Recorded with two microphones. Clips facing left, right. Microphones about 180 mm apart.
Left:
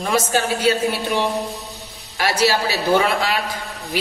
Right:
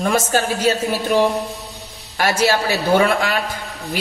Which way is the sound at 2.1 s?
50° right (ahead or behind).